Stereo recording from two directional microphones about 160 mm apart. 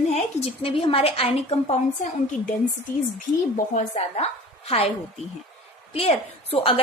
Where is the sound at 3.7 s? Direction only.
40° left (ahead or behind).